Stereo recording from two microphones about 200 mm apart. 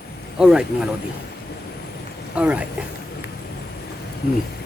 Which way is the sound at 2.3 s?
5° right (ahead or behind).